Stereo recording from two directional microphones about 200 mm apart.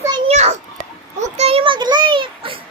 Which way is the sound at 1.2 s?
30° right (ahead or behind).